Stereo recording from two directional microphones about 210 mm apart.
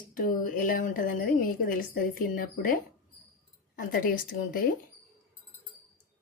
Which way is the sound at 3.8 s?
40° left (ahead or behind).